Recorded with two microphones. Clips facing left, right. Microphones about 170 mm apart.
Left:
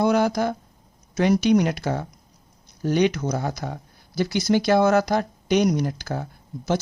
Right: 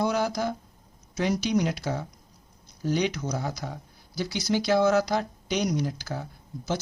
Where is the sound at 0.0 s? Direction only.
60° left (ahead or behind).